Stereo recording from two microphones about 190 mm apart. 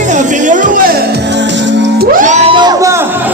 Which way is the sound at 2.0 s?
45° right (ahead or behind).